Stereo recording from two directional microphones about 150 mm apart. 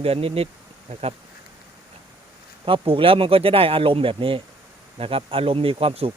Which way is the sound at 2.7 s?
35° right (ahead or behind).